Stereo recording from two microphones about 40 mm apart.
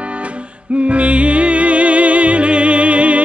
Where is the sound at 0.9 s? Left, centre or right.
Right.